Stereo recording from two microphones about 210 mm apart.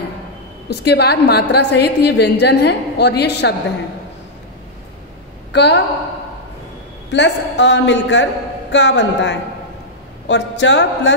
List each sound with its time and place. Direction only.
0.8 s a woman's voice: 50° left (ahead or behind)
5.5 s a woman's voice: 55° left (ahead or behind)
7.1 s a man's voice: 55° left (ahead or behind)